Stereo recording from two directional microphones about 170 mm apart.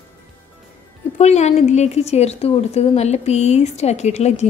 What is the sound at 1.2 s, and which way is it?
A woman's voice, 40° left (ahead or behind).